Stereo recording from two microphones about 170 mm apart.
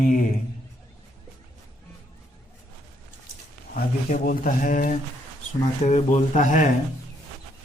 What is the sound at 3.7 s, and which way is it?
Speech, 55° left (ahead or behind).